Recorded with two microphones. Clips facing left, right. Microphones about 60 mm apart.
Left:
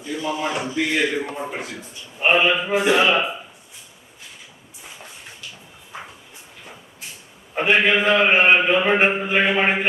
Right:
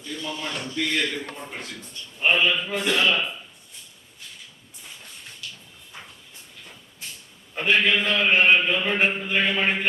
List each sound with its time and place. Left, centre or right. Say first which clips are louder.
0.0 s a man's voice: left 7 dB; centre
2.2 s a man's voice: left 4 dB; left
4.8 s a sound: left 3 dB; centre
7.5 s a man's voice: left 4 dB; left